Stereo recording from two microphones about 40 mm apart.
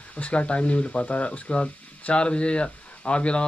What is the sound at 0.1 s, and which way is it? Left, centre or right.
Speech, left.